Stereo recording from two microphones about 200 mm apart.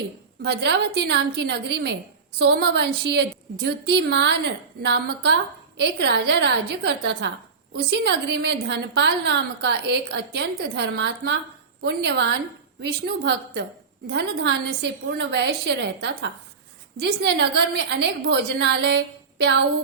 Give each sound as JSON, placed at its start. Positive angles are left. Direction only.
{"t": 0.4, "sound": "a woman's voice", "side_deg": -55}